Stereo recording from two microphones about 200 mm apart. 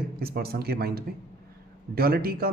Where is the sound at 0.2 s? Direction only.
50° right (ahead or behind).